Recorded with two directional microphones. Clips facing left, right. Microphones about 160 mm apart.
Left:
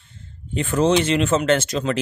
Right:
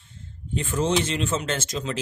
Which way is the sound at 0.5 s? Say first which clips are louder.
Left 6 dB; 65° left (ahead or behind).